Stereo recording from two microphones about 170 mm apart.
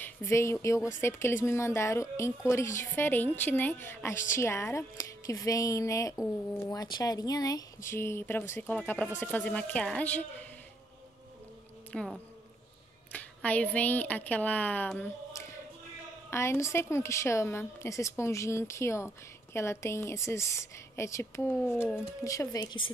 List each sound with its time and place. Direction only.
0.0 s speech: 15° left (ahead or behind)
11.9 s a woman's voice: 5° left (ahead or behind); by 22.8 s 25° left (ahead or behind)